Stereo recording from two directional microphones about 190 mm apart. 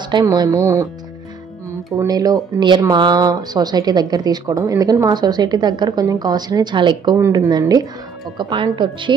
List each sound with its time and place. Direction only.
0.1 s speech: 20° right (ahead or behind)
2.0 s speech: 20° right (ahead or behind)